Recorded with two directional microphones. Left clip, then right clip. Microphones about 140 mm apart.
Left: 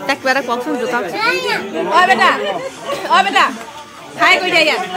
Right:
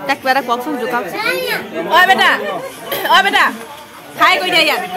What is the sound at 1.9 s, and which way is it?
Speech, 75° right (ahead or behind).